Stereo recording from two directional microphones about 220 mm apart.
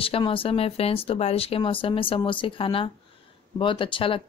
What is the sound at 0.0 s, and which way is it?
Speech, 25° left (ahead or behind).